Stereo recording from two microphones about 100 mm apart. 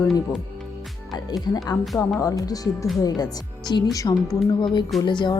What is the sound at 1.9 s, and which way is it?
Speech, 15° left (ahead or behind).